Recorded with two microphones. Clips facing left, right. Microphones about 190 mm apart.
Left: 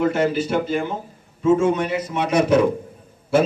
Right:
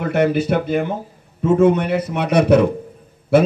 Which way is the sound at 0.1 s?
60° right (ahead or behind).